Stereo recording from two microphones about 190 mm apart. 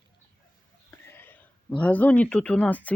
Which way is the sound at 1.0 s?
10° left (ahead or behind).